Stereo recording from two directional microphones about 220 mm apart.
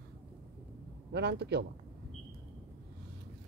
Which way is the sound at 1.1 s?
50° right (ahead or behind).